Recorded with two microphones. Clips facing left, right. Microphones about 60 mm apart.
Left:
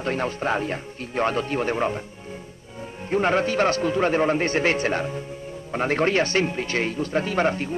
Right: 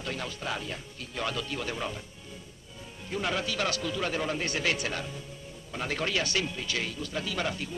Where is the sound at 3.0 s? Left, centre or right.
Left.